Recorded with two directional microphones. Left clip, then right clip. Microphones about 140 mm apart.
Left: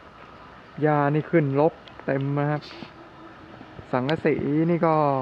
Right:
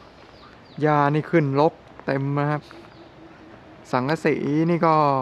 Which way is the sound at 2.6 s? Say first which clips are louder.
Left 3 dB; 10° right (ahead or behind).